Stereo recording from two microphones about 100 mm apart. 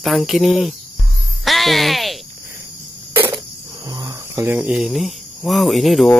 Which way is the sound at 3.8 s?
40° right (ahead or behind).